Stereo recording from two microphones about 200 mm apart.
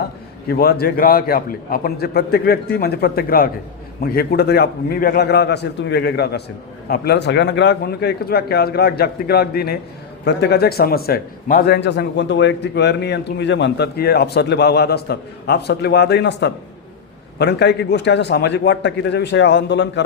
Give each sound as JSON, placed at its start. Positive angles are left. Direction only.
{"t": 0.0, "sound": "a man's voice", "side_deg": 50}